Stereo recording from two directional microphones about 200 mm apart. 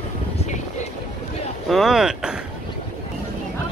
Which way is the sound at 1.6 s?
Centre (ahead or behind).